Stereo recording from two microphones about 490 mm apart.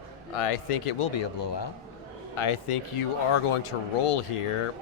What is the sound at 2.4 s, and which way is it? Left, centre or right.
Speech, left.